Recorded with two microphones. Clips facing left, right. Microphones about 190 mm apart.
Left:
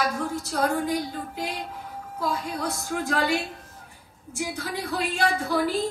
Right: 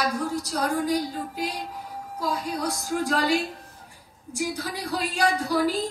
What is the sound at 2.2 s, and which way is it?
A woman's voice, 40° right (ahead or behind).